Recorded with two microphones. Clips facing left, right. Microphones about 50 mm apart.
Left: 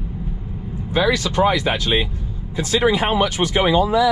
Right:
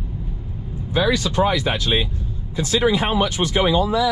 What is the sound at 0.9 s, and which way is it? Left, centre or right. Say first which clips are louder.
Speech: left 1 dB; left.